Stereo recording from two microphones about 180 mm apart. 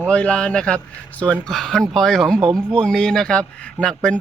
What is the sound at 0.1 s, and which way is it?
A man's voice, 5° left (ahead or behind).